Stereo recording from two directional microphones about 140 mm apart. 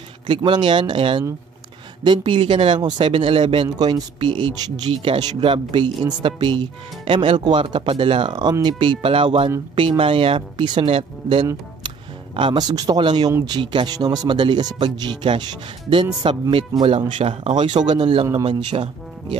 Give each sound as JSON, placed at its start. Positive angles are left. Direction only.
{"t": 0.3, "sound": "speech", "side_deg": -35}